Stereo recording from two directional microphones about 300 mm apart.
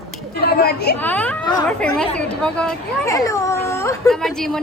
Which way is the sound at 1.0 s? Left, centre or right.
Centre.